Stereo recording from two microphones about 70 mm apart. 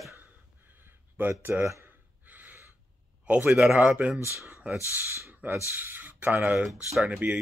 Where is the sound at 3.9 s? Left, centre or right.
Centre.